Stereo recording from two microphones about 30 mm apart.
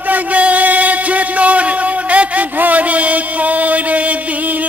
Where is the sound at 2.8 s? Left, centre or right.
Right.